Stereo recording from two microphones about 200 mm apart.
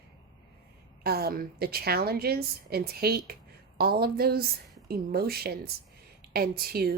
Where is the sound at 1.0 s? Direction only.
50° right (ahead or behind).